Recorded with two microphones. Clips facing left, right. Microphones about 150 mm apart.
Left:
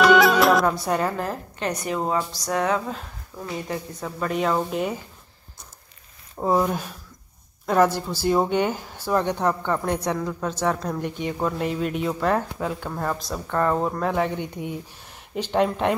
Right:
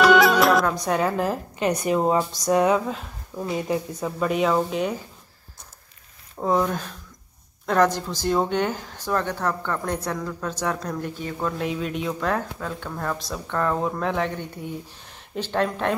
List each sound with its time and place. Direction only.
0.0 s music: centre (ahead or behind)
0.8 s speech: centre (ahead or behind)
6.3 s speech: 10° left (ahead or behind)
11.1 s speech: 15° left (ahead or behind)
11.5 s speech: centre (ahead or behind)